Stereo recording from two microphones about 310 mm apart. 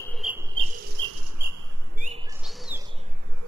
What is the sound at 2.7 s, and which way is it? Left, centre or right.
Bird, centre.